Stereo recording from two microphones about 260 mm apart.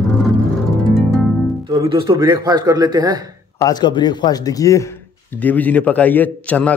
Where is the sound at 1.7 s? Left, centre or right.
Centre.